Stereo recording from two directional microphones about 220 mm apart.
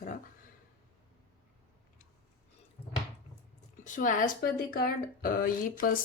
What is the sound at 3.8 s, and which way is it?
A woman's voice, 35° left (ahead or behind).